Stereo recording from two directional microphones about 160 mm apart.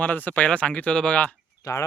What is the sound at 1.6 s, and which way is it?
Speech, 25° left (ahead or behind).